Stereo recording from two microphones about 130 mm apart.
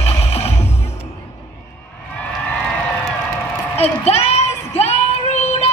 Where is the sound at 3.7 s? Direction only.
50° left (ahead or behind).